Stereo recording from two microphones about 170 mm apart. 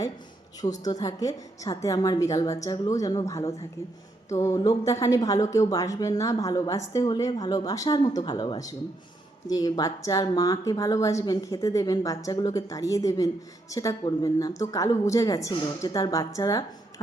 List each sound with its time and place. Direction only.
0.9 s a woman's voice: 20° left (ahead or behind)